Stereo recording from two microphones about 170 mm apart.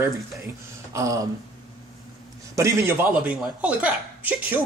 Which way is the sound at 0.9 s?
20° right (ahead or behind).